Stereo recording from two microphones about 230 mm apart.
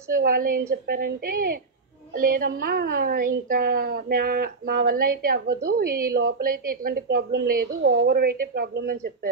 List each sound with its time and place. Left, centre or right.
0.1 s a woman's voice: right